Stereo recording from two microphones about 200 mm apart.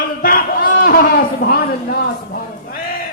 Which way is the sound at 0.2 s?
45° left (ahead or behind).